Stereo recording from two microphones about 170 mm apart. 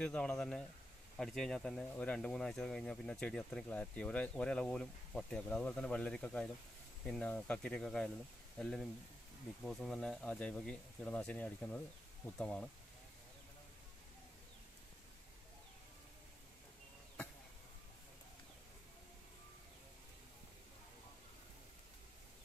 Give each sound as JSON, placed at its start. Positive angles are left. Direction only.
{"t": 0.0, "sound": "speech", "side_deg": 5}